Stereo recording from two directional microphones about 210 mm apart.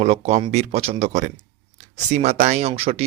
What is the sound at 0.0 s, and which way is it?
Speech, 30° right (ahead or behind).